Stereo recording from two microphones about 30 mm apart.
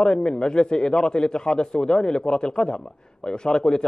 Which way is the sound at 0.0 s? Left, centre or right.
Left.